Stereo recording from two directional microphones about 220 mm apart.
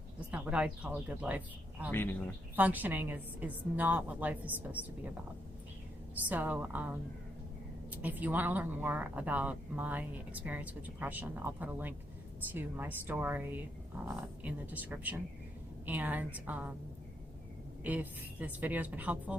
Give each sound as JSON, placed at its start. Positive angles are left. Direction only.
{"t": 0.3, "sound": "speech", "side_deg": -5}
{"t": 1.9, "sound": "speech", "side_deg": 10}
{"t": 2.6, "sound": "speech", "side_deg": -5}
{"t": 6.2, "sound": "speech", "side_deg": -5}
{"t": 17.8, "sound": "speech", "side_deg": -5}